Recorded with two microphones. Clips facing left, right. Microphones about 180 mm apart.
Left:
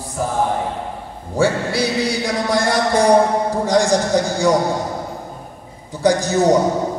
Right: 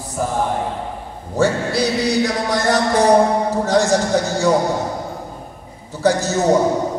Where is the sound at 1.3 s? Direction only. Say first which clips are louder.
Even; 10° left (ahead or behind).